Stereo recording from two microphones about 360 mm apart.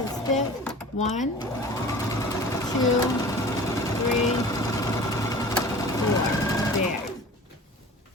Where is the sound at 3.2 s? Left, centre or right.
Centre.